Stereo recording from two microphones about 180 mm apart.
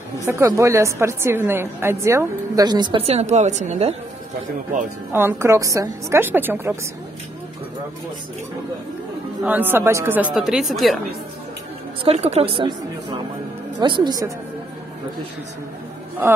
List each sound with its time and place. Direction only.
0.2 s a woman's voice: 15° right (ahead or behind); by 3.9 s 40° right (ahead or behind)
5.1 s a woman's voice: 15° right (ahead or behind)
9.4 s a woman's voice: 10° right (ahead or behind)
12.0 s a woman's voice: 35° right (ahead or behind)